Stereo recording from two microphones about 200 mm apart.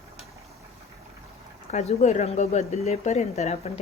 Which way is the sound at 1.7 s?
35° left (ahead or behind).